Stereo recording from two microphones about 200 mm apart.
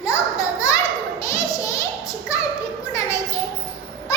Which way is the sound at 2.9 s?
15° left (ahead or behind).